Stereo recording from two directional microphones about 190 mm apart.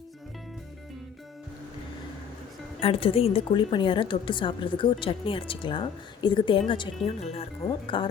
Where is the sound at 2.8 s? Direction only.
30° left (ahead or behind).